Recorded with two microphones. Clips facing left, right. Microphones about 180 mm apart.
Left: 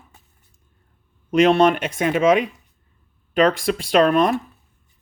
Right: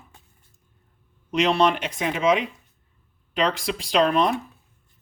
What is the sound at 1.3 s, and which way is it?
Speech, 50° left (ahead or behind).